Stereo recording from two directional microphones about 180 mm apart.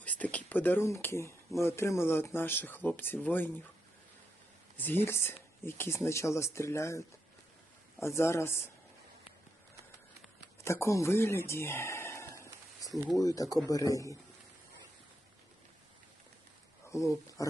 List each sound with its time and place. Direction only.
0.0 s speech: 10° left (ahead or behind)
4.8 s speech: 10° left (ahead or behind)
8.0 s speech: 15° left (ahead or behind)
10.6 s speech: 15° left (ahead or behind)
16.9 s speech: 15° left (ahead or behind)